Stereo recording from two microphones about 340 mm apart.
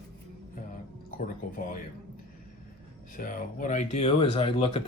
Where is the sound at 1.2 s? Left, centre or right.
Left.